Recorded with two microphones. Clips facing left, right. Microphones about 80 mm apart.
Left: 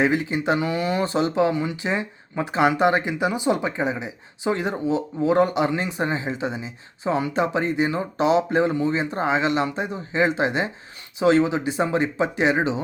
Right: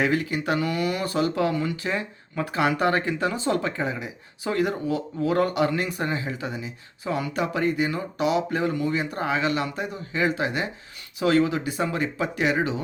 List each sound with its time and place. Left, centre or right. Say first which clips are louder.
0.0 s speech: left 3 dB; left